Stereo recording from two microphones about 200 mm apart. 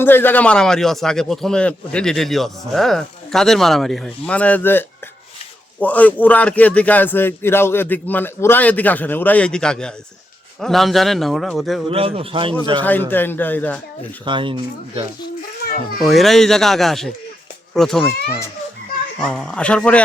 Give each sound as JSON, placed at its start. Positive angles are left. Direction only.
{"t": 0.0, "sound": "a man's voice", "side_deg": 10}
{"t": 11.9, "sound": "speech", "side_deg": -30}
{"t": 12.8, "sound": "a man's voice", "side_deg": 10}
{"t": 14.3, "sound": "speech", "side_deg": -25}
{"t": 16.0, "sound": "a man's voice", "side_deg": 0}
{"t": 19.2, "sound": "a man's voice", "side_deg": 5}